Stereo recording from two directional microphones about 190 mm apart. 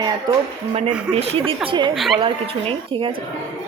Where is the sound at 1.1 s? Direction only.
30° right (ahead or behind).